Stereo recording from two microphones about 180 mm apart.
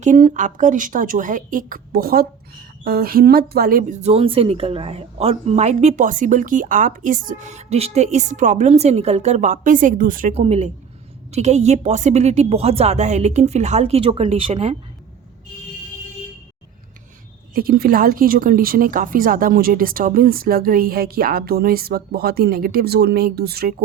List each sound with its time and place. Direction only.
0.0 s a woman's voice: 45° right (ahead or behind)
10.3 s a woman's voice: 35° right (ahead or behind)
17.5 s speech: 55° right (ahead or behind)